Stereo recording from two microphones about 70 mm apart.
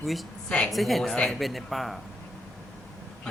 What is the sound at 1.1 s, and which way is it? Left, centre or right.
Speech, centre.